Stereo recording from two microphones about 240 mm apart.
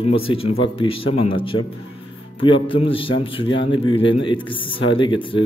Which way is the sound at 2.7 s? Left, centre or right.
Left.